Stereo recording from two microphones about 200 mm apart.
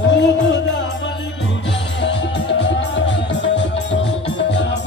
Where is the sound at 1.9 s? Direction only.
60° left (ahead or behind).